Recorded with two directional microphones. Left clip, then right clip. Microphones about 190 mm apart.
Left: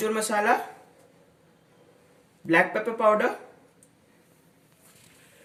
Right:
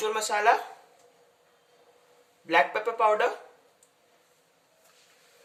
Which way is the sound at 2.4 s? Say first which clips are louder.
Left 1 dB; 20° right (ahead or behind).